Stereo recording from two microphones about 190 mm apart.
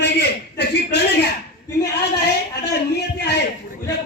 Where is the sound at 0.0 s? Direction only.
60° left (ahead or behind).